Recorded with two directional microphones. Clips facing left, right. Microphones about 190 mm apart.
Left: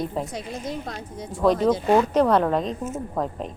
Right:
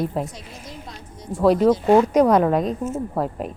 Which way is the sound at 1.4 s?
5° right (ahead or behind).